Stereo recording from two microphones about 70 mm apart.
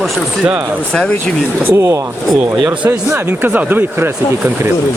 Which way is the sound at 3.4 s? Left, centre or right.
Right.